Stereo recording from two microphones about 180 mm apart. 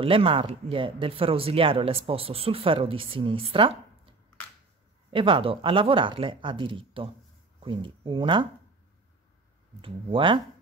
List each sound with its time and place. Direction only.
0.0 s speech: 30° right (ahead or behind)
5.1 s speech: 30° right (ahead or behind)
9.8 s speech: 30° right (ahead or behind)